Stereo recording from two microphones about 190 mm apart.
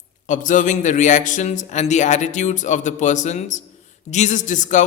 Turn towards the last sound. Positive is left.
turn(degrees=40)  # may be behind; listen again after turning